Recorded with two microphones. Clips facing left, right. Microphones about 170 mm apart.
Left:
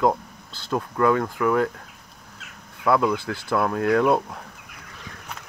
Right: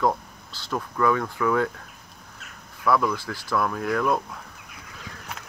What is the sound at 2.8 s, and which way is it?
Speech, 25° left (ahead or behind).